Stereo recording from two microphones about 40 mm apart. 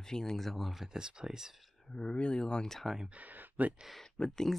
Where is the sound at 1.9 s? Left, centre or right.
Left.